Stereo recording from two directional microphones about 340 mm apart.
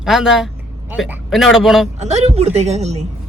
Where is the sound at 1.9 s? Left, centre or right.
Centre.